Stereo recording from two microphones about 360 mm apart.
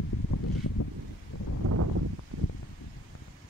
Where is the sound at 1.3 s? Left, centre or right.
Left.